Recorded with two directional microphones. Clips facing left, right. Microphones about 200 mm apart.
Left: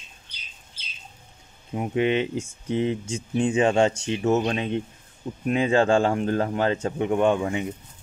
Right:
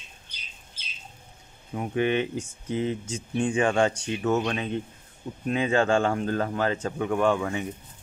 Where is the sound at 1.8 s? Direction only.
20° left (ahead or behind).